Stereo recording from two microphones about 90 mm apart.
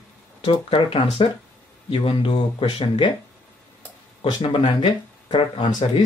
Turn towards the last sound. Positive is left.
turn(degrees=60)  # may be behind; listen again after turning